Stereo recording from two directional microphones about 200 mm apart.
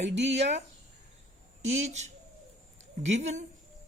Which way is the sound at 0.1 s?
60° right (ahead or behind).